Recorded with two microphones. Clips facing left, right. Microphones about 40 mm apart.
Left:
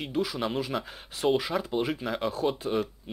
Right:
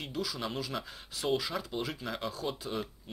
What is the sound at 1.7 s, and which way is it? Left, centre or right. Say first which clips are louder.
Speech: left 7 dB; centre.